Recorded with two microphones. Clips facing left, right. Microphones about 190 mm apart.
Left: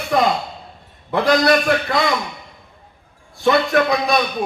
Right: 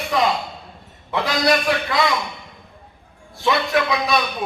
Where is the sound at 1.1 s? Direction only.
50° left (ahead or behind).